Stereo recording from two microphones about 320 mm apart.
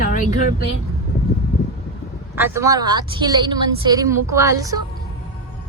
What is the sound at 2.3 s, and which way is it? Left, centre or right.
A woman's voice, centre.